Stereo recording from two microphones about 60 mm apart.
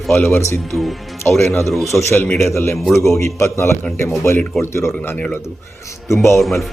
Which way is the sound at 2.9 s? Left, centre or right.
Left.